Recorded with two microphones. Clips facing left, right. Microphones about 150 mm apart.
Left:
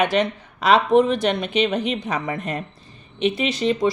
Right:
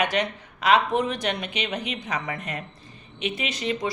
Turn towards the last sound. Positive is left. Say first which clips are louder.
# left 8 dB
turn(degrees=30)  # may be behind; listen again after turning